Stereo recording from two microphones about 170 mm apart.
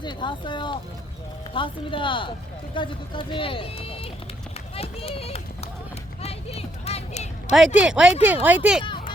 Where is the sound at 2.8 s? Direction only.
30° left (ahead or behind).